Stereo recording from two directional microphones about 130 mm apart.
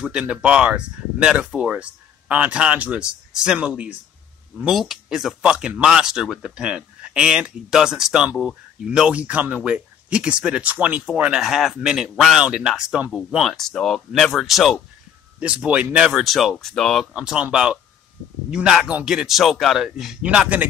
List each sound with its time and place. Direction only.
0.0 s speech: 5° right (ahead or behind)